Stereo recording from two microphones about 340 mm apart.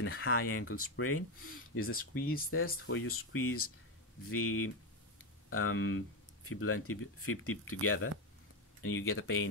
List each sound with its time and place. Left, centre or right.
0.0 s speech: left
2.0 s speech: left
2.6 s speech: left